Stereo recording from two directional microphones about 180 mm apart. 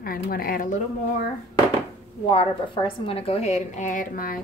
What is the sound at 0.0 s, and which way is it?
Speech, 55° left (ahead or behind).